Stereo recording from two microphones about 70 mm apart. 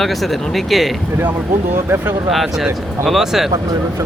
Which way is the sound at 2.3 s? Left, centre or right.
Centre.